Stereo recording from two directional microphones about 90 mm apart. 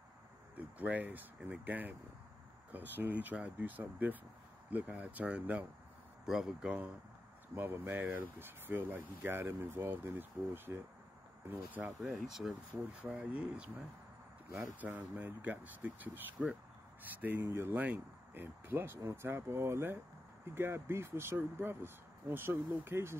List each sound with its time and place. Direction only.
0.6 s speech: 15° right (ahead or behind)
7.5 s speech: 25° right (ahead or behind)
12.0 s speech: 5° right (ahead or behind)
13.0 s speech: 15° right (ahead or behind)